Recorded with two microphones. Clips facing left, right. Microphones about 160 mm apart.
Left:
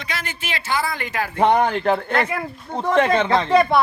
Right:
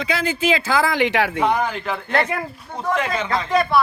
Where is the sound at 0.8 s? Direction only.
90° right.